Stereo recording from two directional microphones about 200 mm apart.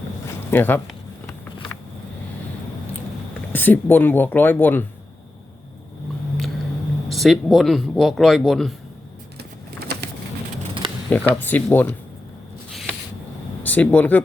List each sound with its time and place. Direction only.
0.5 s speech: 10° left (ahead or behind)
3.5 s speech: 10° left (ahead or behind)
7.1 s speech: centre (ahead or behind)
9.9 s pigeon: 55° right (ahead or behind)
11.1 s speech: 10° left (ahead or behind)
13.6 s speech: 10° left (ahead or behind)